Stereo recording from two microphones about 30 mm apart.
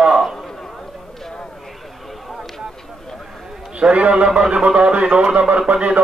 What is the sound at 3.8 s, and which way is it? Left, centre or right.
Speech, right.